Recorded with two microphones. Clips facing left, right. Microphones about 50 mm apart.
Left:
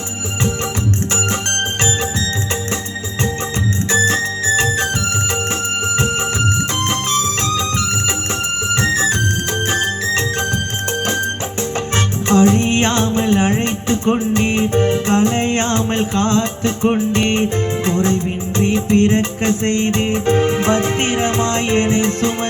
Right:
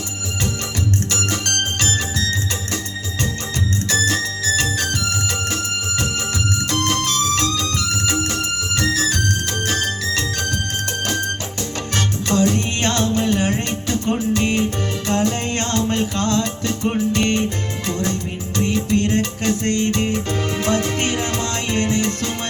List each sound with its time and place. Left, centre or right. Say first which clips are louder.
1.1 s music: left 3 dB; left
3.8 s music: left 5 dB; left
6.8 s music: even; left
11.9 s music: left 5 dB; left